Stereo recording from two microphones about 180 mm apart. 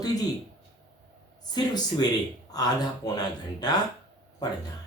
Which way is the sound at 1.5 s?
25° left (ahead or behind).